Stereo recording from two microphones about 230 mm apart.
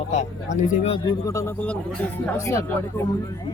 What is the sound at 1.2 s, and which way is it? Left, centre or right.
Speech, centre.